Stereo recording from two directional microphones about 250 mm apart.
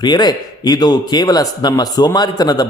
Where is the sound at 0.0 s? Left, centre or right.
Centre.